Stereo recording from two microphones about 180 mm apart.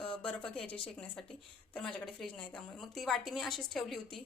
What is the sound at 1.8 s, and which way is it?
A woman's voice, 5° left (ahead or behind).